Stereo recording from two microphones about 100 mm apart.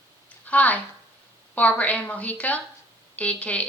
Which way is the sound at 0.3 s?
15° left (ahead or behind).